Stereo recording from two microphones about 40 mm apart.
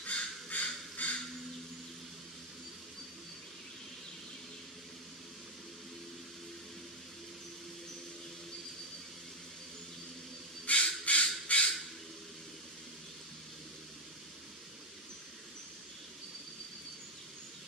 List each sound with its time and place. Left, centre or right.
0.0 s crow: left
10.7 s crow: left